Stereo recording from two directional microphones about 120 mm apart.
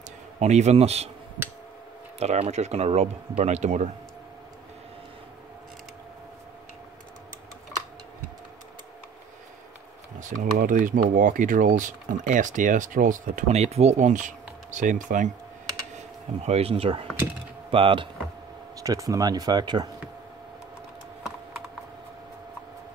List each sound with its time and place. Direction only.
0.4 s speech: 70° right (ahead or behind)
2.1 s speech: 60° right (ahead or behind)
10.2 s speech: 90° right
16.4 s speech: 55° right (ahead or behind)
18.8 s speech: 30° right (ahead or behind)